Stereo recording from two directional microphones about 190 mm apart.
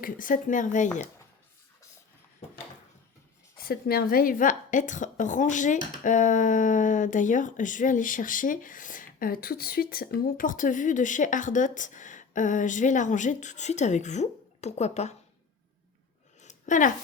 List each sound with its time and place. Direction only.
0.0 s speech: 45° left (ahead or behind)
3.6 s a woman's voice: 50° left (ahead or behind); by 15.1 s 35° left (ahead or behind)
16.4 s a sound: 40° left (ahead or behind)